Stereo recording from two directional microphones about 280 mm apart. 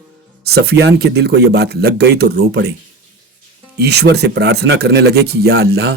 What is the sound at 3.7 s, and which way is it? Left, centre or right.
Speech, right.